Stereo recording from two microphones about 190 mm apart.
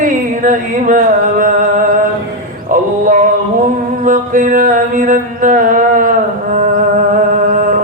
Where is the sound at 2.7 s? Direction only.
45° right (ahead or behind).